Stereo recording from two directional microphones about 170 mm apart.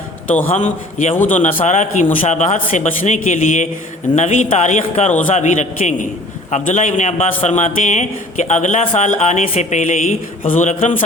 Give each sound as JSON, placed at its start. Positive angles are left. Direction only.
{"t": 0.5, "sound": "a man's voice", "side_deg": 45}